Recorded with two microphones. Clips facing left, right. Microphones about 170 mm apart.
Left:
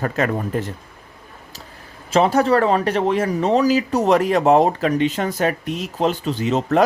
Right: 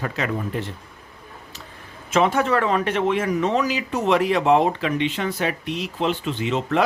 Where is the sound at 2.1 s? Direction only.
35° left (ahead or behind).